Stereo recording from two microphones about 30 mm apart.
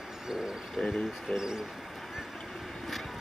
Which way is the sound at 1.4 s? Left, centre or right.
Right.